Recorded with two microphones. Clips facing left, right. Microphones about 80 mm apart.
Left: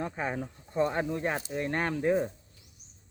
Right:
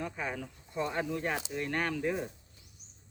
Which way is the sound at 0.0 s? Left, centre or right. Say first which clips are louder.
Left 4 dB; left.